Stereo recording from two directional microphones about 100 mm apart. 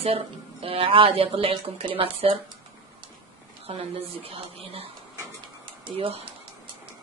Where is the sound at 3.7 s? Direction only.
70° right (ahead or behind).